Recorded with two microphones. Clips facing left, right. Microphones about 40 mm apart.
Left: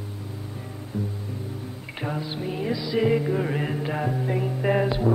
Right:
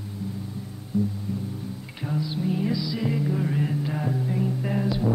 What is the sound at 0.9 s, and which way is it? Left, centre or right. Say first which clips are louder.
Music: right 5 dB; left.